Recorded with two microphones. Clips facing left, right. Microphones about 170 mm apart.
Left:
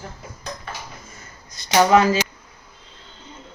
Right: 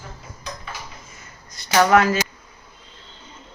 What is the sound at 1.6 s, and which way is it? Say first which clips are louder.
Speech: left 1 dB; 20° left (ahead or behind).